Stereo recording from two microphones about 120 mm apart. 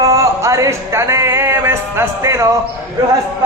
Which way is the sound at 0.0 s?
25° right (ahead or behind).